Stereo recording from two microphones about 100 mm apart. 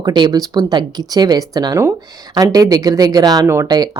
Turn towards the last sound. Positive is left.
turn(degrees=-25)  # may be behind; listen again after turning